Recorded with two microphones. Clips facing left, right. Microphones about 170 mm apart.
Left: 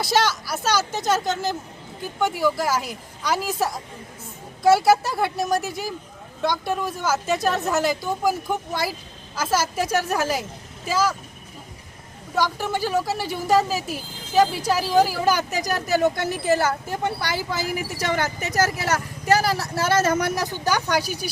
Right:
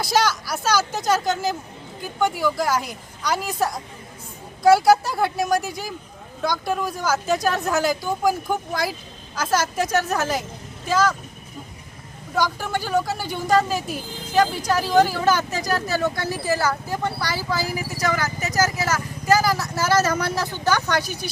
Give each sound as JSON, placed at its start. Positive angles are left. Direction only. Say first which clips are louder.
{"t": 0.0, "sound": "speech", "louder": "even", "side_deg": 0}
{"t": 12.4, "sound": "speech", "louder": "left 1 dB", "side_deg": 0}